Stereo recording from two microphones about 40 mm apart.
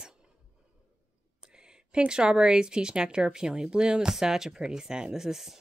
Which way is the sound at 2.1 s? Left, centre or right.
Centre.